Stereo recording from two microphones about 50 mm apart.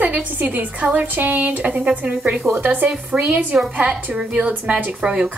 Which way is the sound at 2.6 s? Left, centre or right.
Right.